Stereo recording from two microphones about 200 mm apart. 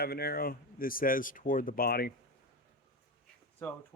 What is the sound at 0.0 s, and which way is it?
Speech, 50° left (ahead or behind).